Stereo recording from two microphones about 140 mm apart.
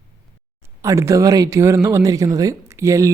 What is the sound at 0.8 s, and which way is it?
Speech, 20° right (ahead or behind).